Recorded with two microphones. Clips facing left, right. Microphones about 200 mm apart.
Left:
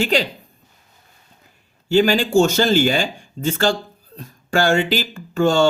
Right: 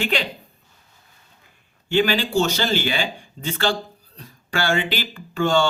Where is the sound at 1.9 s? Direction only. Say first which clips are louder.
Left 5 dB; 40° left (ahead or behind).